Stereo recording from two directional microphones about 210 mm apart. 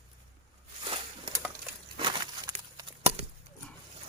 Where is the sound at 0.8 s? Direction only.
25° right (ahead or behind).